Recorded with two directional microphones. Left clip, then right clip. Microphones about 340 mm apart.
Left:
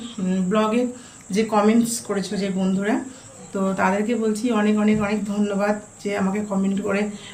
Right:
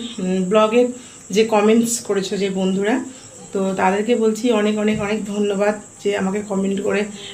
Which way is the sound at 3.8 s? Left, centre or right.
Centre.